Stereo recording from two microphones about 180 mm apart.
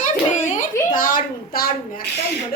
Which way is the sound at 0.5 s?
45° left (ahead or behind).